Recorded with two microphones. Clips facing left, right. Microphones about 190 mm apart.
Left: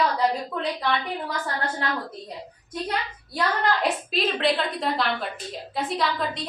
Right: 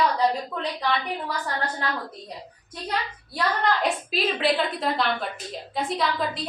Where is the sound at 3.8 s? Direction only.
Centre (ahead or behind).